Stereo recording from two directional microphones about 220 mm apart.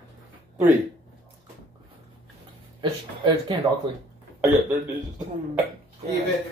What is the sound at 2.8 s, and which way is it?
Speech, 20° right (ahead or behind).